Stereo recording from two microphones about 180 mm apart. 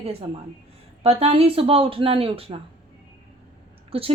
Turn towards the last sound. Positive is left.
turn(degrees=-30)  # may be behind; listen again after turning